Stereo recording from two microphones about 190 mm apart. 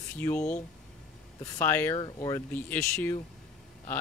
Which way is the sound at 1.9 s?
25° left (ahead or behind).